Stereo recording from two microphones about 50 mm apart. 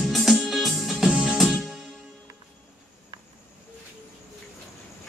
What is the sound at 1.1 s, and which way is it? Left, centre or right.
Music, centre.